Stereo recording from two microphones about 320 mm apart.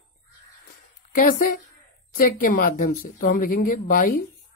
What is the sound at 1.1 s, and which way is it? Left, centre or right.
Speech, left.